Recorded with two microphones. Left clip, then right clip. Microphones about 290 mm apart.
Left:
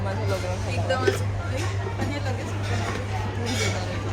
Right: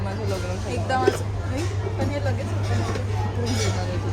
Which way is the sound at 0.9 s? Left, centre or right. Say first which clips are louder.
Right 2 dB; right.